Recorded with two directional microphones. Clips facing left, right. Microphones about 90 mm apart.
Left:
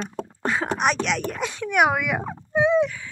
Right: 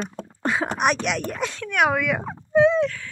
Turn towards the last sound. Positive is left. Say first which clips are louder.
# right 2 dB
turn(degrees=10)  # may be behind; listen again after turning